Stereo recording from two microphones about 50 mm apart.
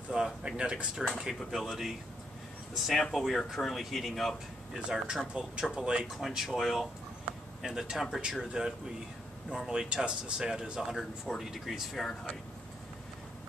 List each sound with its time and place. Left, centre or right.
0.1 s a sound: centre
1.0 s speech: centre
4.7 s speech: centre
6.2 s speech: centre
7.9 s speech: centre